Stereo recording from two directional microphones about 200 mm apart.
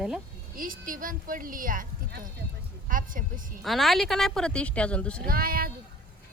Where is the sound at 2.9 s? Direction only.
45° right (ahead or behind).